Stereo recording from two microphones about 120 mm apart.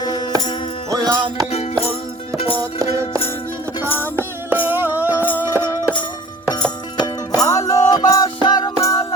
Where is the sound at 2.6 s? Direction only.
25° right (ahead or behind).